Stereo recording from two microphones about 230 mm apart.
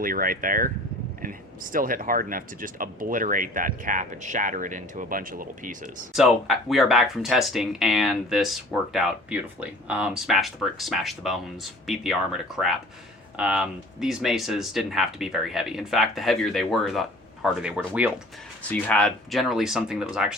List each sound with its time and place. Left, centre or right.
0.0 s speech: right
6.1 s speech: centre
18.7 s speech: centre